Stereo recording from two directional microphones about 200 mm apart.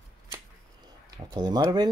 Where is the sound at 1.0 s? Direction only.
20° right (ahead or behind).